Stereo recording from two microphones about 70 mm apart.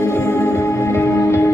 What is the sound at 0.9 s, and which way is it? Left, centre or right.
Music, left.